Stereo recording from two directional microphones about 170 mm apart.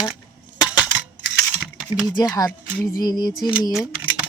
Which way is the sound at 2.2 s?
20° left (ahead or behind).